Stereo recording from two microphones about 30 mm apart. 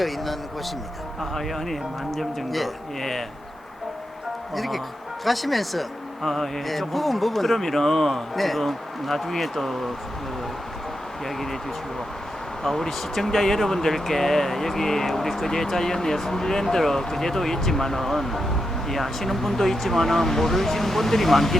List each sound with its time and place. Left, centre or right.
0.0 s a sound: centre
1.2 s speech: centre
4.5 s speech: centre
12.6 s speech: centre
13.0 s speech: centre